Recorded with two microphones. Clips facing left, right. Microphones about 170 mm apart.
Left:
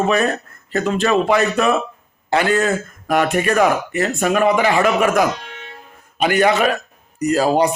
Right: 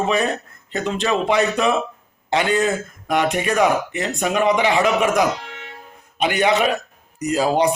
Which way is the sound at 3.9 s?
15° right (ahead or behind).